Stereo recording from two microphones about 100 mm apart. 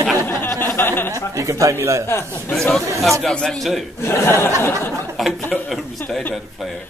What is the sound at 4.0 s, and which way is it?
Speech, 25° left (ahead or behind).